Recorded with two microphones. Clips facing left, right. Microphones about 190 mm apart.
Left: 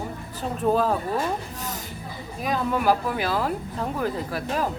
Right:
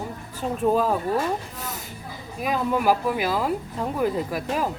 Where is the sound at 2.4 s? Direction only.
10° right (ahead or behind).